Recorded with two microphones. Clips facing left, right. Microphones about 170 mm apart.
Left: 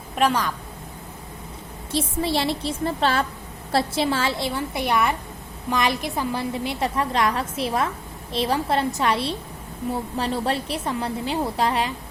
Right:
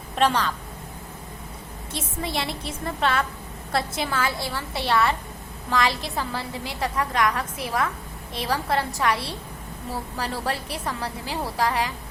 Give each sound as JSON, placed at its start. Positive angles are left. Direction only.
{"t": 0.2, "sound": "a woman's voice", "side_deg": 10}
{"t": 1.9, "sound": "a woman's voice", "side_deg": 35}